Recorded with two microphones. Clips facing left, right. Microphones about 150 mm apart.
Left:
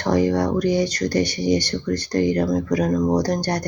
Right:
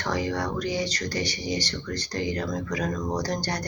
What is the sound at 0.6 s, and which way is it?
Speech, 55° left (ahead or behind).